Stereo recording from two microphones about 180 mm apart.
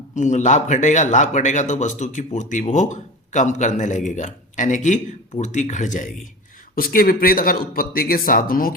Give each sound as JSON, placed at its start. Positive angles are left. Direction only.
{"t": 0.1, "sound": "speech", "side_deg": 40}